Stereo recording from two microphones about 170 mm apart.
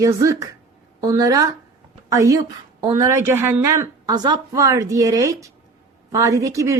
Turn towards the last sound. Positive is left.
turn(degrees=-20)  # may be behind; listen again after turning